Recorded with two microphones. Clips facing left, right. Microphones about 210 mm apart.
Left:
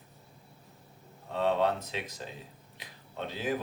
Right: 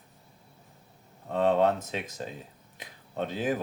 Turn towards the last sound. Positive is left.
turn(degrees=-50)  # may be behind; listen again after turning